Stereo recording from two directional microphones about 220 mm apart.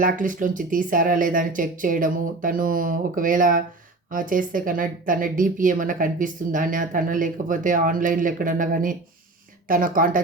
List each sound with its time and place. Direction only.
0.0 s speech: 35° right (ahead or behind)